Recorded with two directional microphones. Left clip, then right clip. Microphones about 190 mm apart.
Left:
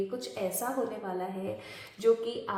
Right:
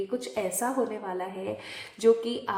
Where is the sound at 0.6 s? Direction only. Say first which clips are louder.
Right 5 dB; 20° right (ahead or behind).